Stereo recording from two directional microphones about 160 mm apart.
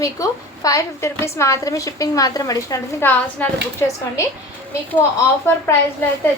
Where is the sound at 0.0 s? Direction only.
20° left (ahead or behind).